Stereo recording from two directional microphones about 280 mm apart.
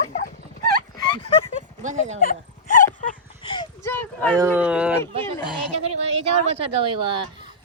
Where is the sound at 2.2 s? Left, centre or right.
Left.